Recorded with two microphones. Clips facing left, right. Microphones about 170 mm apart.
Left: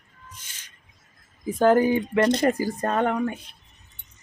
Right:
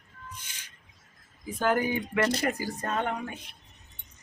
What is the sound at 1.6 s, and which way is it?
Speech, 35° left (ahead or behind).